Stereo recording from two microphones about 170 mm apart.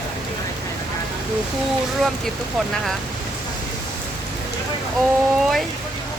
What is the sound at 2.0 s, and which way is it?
Speech, centre (ahead or behind).